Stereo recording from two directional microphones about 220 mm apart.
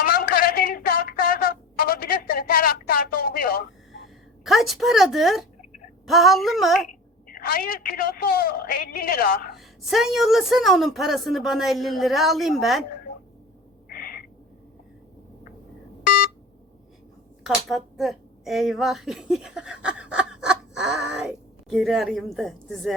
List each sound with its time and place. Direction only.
0.0 s a sound: 40° left (ahead or behind)
4.0 s a woman's voice: centre (ahead or behind)
7.3 s a woman's voice: 40° left (ahead or behind)
9.6 s a woman's voice: centre (ahead or behind)
13.9 s owl: 40° left (ahead or behind)
16.0 s a sound: 40° left (ahead or behind)
17.4 s a woman's voice: centre (ahead or behind)